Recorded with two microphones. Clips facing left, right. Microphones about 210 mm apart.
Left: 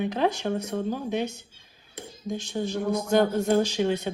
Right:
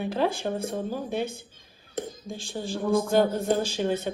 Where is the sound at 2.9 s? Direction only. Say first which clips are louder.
Right 1 dB; 50° right (ahead or behind).